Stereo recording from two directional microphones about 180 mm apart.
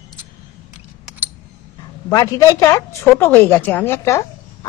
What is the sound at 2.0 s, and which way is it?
A woman's voice, 20° left (ahead or behind).